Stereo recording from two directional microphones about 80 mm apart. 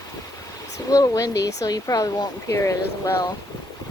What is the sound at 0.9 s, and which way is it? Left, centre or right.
Speech, left.